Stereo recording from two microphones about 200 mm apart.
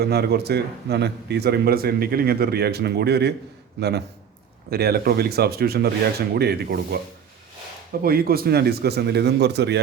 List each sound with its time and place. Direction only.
0.0 s speech: 55° right (ahead or behind)
8.0 s speech: 50° right (ahead or behind)